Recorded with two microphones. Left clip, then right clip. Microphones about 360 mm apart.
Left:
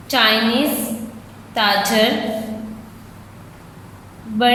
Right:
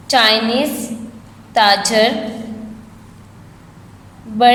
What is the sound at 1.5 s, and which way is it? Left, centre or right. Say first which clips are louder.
Speech: right 4 dB; centre.